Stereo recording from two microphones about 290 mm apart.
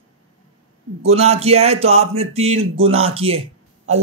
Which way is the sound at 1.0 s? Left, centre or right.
Right.